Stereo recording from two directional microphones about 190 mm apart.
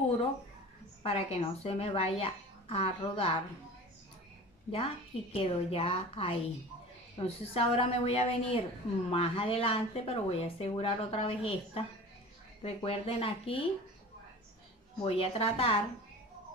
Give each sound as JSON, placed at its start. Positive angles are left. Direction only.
{"t": 1.0, "sound": "speech", "side_deg": 35}
{"t": 4.6, "sound": "a woman's voice", "side_deg": 30}
{"t": 15.0, "sound": "speech", "side_deg": 30}